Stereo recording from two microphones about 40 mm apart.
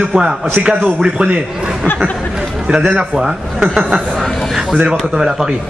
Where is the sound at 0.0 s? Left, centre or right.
Centre.